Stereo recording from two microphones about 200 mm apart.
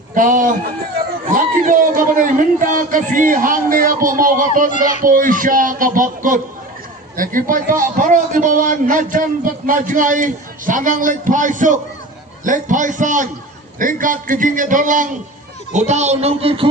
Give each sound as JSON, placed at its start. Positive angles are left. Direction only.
{"t": 0.1, "sound": "a man's voice", "side_deg": -40}